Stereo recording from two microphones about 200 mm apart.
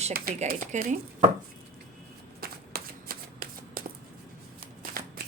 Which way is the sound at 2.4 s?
50° right (ahead or behind).